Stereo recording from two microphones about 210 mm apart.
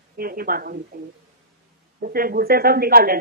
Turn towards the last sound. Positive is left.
turn(degrees=-45)  # may be behind; listen again after turning